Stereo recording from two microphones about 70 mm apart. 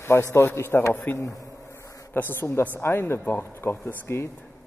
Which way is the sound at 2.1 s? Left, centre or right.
Left.